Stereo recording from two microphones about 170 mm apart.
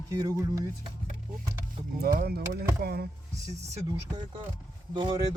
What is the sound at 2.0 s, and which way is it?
Speech, 60° right (ahead or behind).